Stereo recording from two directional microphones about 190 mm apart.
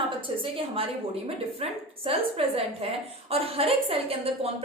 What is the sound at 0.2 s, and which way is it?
A woman's voice, 30° right (ahead or behind).